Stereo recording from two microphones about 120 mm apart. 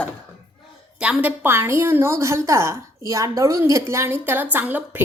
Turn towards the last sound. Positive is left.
turn(degrees=-15)  # may be behind; listen again after turning